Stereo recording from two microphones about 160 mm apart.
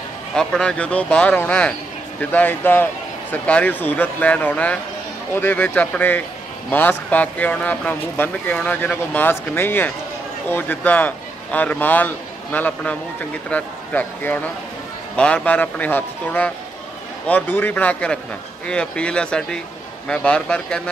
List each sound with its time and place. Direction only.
0.4 s speech: 5° left (ahead or behind)